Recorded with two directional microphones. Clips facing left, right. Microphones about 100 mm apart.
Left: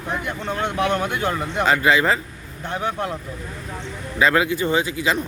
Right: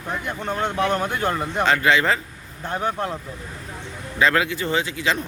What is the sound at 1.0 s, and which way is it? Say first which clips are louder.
Speech: even; 10° left (ahead or behind).